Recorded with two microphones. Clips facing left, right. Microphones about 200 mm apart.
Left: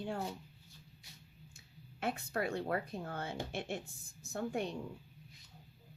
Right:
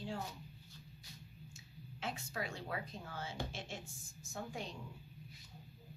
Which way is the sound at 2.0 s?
60° left (ahead or behind).